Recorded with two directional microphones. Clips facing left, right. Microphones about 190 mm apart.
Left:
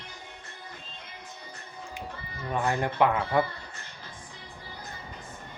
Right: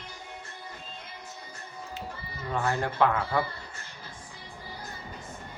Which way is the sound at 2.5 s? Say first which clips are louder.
Left 1 dB; 15° left (ahead or behind).